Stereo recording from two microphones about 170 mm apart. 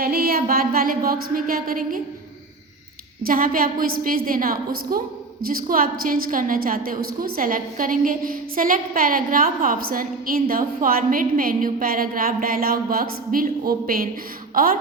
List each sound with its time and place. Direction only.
0.0 s a woman's voice: 65° right (ahead or behind)
3.2 s a woman's voice: 55° right (ahead or behind)